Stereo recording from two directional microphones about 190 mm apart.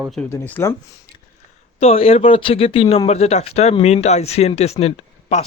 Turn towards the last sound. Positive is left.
turn(degrees=35)  # may be behind; listen again after turning